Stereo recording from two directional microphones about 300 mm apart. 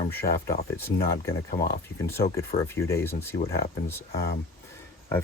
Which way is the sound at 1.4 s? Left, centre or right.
Left.